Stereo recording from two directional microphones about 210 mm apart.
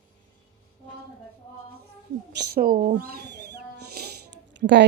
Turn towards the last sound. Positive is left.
turn(degrees=-55)  # may be behind; listen again after turning